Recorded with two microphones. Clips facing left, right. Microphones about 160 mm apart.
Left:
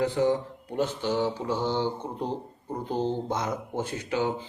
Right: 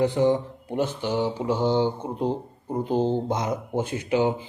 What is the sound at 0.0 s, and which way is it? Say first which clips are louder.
Speech: right 3 dB; 20° right (ahead or behind).